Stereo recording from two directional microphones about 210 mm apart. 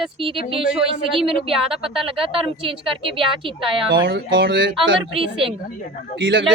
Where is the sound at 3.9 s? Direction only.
55° right (ahead or behind).